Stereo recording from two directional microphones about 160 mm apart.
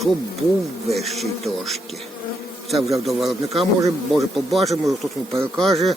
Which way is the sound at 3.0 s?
Centre (ahead or behind).